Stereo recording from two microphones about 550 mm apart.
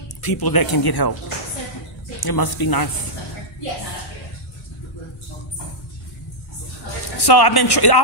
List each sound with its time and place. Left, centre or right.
0.2 s speech: left
2.1 s speech: left
7.2 s speech: left